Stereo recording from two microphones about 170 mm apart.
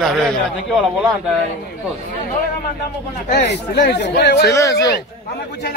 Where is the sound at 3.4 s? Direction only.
85° left.